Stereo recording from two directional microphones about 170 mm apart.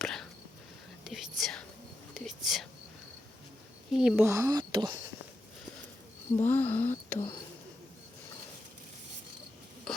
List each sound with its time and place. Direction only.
0.0 s a sound: 5° left (ahead or behind)
1.0 s whispering: centre (ahead or behind)
3.9 s speech: 5° right (ahead or behind)
4.3 s speech: 20° right (ahead or behind)
6.3 s speech: 10° left (ahead or behind)